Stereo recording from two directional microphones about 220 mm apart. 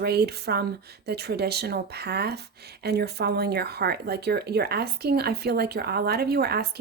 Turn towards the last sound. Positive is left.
turn(degrees=-45)  # may be behind; listen again after turning